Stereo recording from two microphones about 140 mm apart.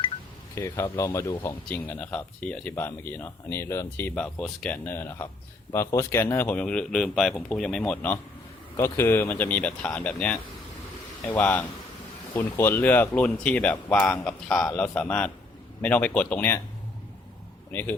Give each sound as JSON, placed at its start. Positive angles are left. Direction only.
{"t": 0.5, "sound": "speech", "side_deg": 20}
{"t": 17.7, "sound": "speech", "side_deg": 15}